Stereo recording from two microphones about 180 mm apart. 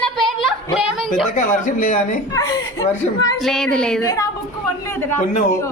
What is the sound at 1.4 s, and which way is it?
Speech, 45° left (ahead or behind).